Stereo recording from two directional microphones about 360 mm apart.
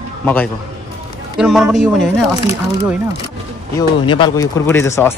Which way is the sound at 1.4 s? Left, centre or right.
Centre.